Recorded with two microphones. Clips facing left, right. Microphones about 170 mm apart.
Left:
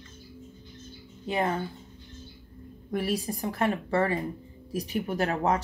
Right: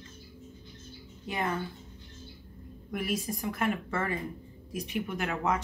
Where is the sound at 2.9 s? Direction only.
35° left (ahead or behind).